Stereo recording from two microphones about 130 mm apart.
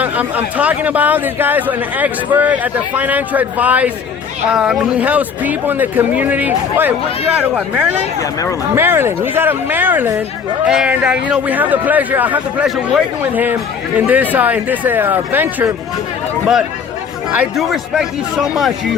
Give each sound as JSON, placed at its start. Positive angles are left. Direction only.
{"t": 0.0, "sound": "speech", "side_deg": -10}
{"t": 8.2, "sound": "speech", "side_deg": 25}
{"t": 8.7, "sound": "speech", "side_deg": -15}
{"t": 17.6, "sound": "speech", "side_deg": 0}